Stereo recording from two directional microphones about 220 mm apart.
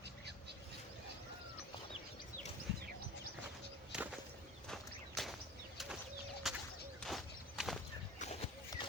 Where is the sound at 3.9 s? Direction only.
5° right (ahead or behind).